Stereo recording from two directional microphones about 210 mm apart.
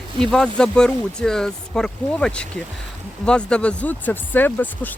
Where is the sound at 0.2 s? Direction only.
5° left (ahead or behind).